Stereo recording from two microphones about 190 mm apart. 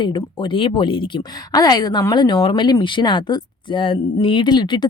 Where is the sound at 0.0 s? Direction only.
25° left (ahead or behind).